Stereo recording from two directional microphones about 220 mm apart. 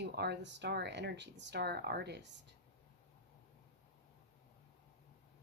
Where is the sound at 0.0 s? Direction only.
50° right (ahead or behind).